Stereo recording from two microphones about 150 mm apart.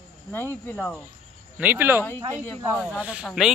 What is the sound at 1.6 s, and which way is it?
Speech, 10° right (ahead or behind).